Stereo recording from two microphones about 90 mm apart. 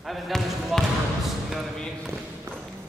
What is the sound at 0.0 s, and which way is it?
Basketball bounce, centre (ahead or behind).